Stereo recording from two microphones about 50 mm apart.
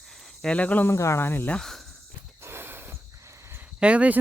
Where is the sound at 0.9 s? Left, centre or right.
Left.